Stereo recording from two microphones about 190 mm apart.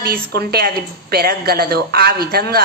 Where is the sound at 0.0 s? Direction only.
55° right (ahead or behind).